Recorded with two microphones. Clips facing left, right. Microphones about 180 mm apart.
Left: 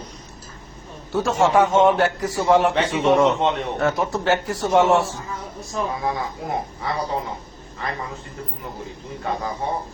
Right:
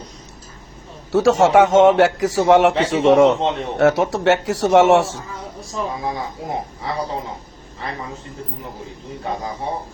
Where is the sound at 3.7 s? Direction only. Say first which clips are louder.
Right 6 dB; 80° right.